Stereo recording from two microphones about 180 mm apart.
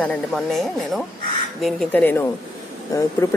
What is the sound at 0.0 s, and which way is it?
Speech, 5° left (ahead or behind).